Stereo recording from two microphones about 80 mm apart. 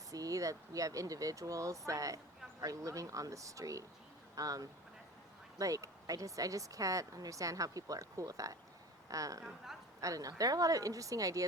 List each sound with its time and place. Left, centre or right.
0.1 s a woman's voice: right